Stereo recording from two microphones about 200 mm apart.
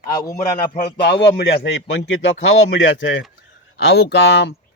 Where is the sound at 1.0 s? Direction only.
55° left (ahead or behind).